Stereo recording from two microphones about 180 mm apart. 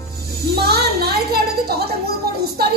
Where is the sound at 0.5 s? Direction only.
60° right (ahead or behind).